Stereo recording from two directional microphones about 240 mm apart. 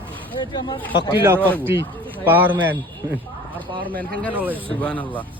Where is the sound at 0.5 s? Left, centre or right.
Centre.